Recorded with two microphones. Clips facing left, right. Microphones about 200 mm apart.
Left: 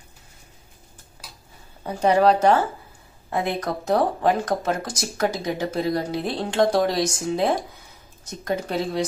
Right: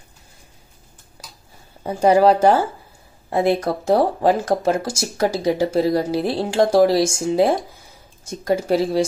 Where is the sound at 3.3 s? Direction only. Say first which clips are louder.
Right 7 dB; 30° right (ahead or behind).